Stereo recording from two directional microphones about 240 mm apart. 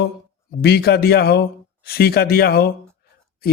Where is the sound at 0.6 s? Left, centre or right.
Left.